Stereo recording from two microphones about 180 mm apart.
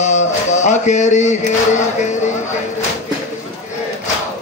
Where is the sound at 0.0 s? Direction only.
40° left (ahead or behind).